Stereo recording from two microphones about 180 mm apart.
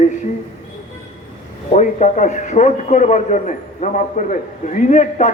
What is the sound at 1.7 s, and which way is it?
A man's voice, 40° left (ahead or behind).